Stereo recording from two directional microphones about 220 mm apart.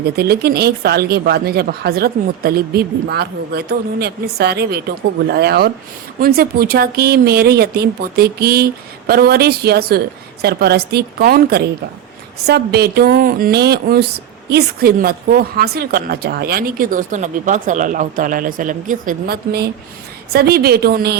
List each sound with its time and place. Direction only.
0.0 s a woman's voice: 45° right (ahead or behind)